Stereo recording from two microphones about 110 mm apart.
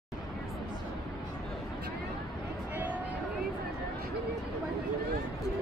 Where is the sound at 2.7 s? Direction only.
15° right (ahead or behind).